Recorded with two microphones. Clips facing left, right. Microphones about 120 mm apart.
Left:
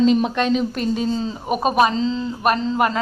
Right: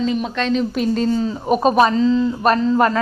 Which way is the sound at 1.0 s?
20° left (ahead or behind).